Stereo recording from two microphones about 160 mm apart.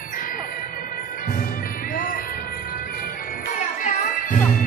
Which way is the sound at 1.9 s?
65° left (ahead or behind).